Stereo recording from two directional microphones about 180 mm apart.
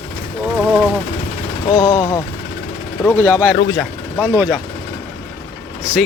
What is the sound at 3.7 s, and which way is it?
Vehicle, 5° left (ahead or behind).